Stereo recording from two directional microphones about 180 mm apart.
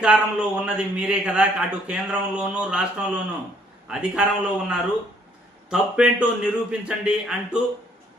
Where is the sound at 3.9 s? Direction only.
5° right (ahead or behind).